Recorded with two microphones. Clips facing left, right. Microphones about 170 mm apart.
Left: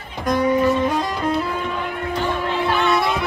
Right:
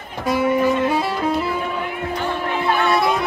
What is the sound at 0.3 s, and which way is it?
Music, 5° right (ahead or behind).